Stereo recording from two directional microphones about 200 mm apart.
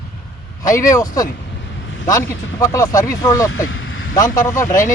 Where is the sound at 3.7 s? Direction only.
80° left.